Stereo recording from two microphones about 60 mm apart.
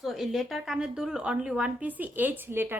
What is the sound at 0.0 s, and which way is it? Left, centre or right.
A woman's voice, centre.